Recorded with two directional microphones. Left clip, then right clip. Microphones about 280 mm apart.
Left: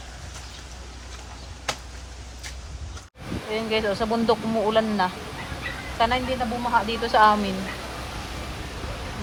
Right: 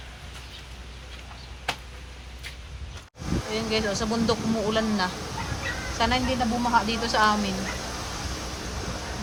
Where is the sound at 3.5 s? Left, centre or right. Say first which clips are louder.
Left 3 dB; centre.